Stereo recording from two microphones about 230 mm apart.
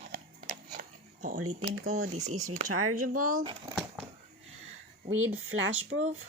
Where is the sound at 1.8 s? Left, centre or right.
Right.